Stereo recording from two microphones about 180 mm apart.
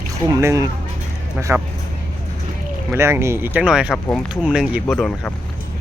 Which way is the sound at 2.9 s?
15° right (ahead or behind).